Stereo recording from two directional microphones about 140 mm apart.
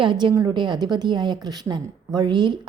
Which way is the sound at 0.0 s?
35° right (ahead or behind).